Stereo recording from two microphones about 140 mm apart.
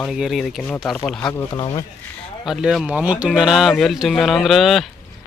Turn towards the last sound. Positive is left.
turn(degrees=0)  # may be behind; listen again after turning